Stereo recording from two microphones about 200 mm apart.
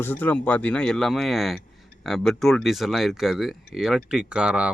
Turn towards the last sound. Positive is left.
turn(degrees=-5)  # may be behind; listen again after turning